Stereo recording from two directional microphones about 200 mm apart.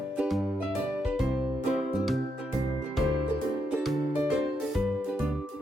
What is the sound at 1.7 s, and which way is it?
Music, centre (ahead or behind).